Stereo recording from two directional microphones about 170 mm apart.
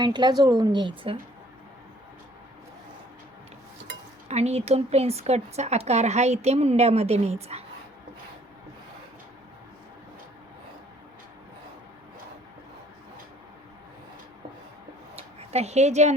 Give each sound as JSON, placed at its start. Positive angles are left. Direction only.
{"t": 0.0, "sound": "speech", "side_deg": -25}
{"t": 4.3, "sound": "speech", "side_deg": -40}
{"t": 15.1, "sound": "a sound", "side_deg": -40}